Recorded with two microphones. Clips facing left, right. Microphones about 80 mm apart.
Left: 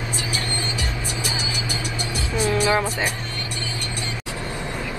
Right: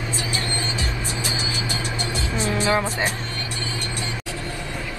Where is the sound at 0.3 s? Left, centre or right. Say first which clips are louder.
Even; right.